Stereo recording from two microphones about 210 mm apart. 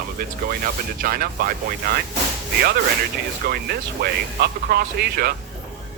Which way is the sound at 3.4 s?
50° right (ahead or behind).